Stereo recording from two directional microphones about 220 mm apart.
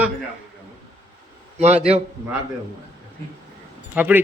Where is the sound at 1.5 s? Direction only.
30° right (ahead or behind).